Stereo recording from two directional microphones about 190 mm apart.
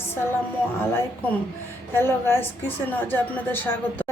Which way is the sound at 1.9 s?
10° left (ahead or behind).